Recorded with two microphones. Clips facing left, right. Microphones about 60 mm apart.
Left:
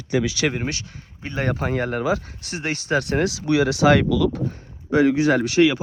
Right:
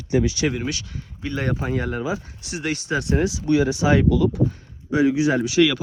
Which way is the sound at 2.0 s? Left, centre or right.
Left.